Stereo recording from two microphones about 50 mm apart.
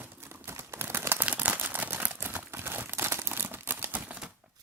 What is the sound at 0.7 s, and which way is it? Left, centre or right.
Crumpling, right.